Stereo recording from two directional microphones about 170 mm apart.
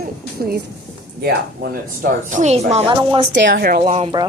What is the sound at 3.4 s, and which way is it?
Speech, 90° right.